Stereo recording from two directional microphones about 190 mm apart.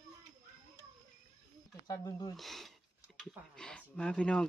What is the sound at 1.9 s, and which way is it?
Speech, 20° left (ahead or behind).